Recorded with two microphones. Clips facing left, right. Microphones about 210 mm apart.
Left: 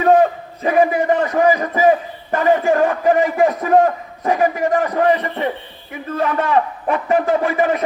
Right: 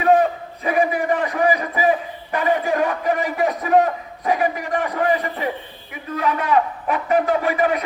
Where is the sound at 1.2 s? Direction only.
45° left (ahead or behind).